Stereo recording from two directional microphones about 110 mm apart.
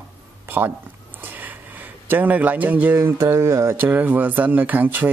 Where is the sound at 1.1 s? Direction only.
15° right (ahead or behind).